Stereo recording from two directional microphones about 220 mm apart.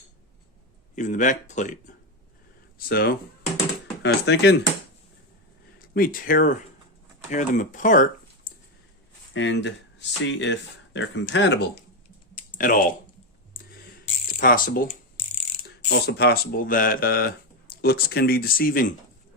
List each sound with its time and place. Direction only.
0.9 s speech: 35° left (ahead or behind)
2.7 s speech: 45° left (ahead or behind)
5.9 s speech: 40° left (ahead or behind)
9.3 s speech: 55° left (ahead or behind)
12.3 s typing: 40° left (ahead or behind)
14.3 s speech: 40° left (ahead or behind)